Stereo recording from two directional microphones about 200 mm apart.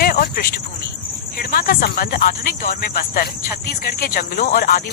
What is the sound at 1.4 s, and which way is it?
Speech, 50° left (ahead or behind).